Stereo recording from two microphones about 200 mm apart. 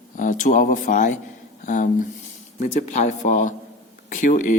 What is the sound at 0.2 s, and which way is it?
Speech, 40° left (ahead or behind).